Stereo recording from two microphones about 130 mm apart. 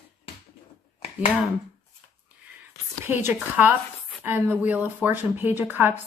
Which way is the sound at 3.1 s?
20° right (ahead or behind).